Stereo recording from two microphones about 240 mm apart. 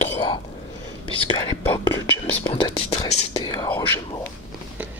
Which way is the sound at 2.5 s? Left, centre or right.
Left.